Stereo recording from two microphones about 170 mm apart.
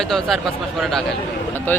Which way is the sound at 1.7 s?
10° left (ahead or behind).